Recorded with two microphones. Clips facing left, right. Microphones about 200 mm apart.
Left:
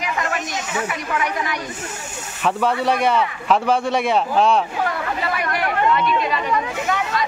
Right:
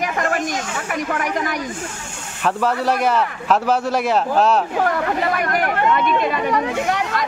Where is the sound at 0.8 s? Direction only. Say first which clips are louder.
Right 1 dB; 45° right (ahead or behind).